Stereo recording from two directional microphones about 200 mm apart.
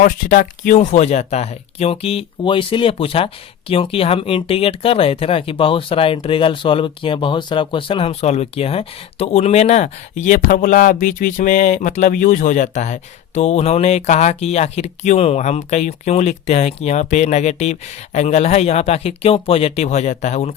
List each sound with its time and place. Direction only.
0.0 s speech: 40° left (ahead or behind)